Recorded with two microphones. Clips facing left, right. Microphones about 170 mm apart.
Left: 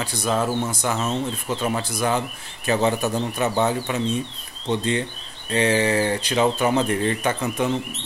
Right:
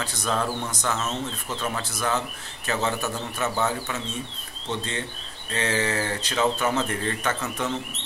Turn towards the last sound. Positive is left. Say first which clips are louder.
# left 5 dB
turn(degrees=15)  # may be behind; listen again after turning